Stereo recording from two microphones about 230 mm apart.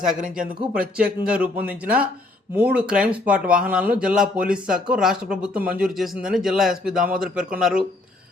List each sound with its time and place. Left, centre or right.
0.2 s speech: right
0.9 s speech: centre